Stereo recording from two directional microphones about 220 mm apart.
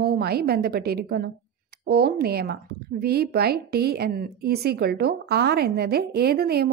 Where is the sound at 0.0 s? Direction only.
45° right (ahead or behind).